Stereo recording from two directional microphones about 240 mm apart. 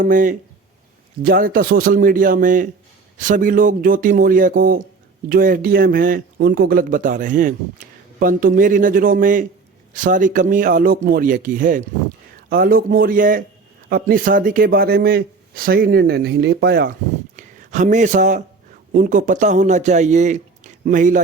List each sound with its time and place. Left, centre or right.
0.0 s speech: right
17.3 s speech: right